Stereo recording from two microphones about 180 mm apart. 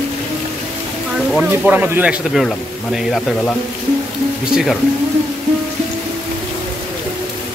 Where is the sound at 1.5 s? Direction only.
10° right (ahead or behind).